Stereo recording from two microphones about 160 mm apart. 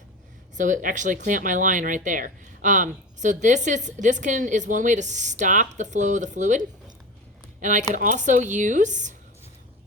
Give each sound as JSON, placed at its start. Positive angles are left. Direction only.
{"t": 0.5, "sound": "speech", "side_deg": -55}
{"t": 7.6, "sound": "speech", "side_deg": -50}